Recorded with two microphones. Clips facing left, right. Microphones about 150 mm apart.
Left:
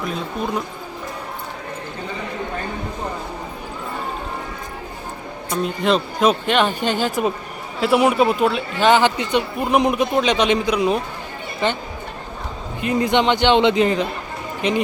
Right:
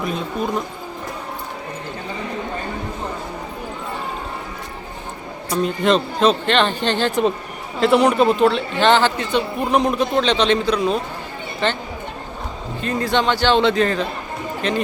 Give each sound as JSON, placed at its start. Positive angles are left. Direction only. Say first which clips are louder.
{"t": 5.6, "sound": "speech", "louder": "right 2 dB", "side_deg": 5}
{"t": 12.8, "sound": "speech", "louder": "left 2 dB", "side_deg": 15}